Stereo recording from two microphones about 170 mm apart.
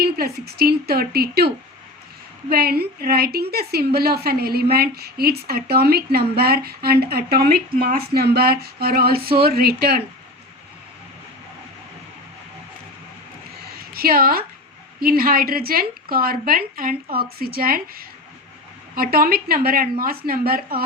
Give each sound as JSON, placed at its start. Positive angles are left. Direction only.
{"t": 0.0, "sound": "a woman's voice", "side_deg": -65}
{"t": 13.7, "sound": "a sound", "side_deg": -60}
{"t": 15.0, "sound": "a woman's voice", "side_deg": -60}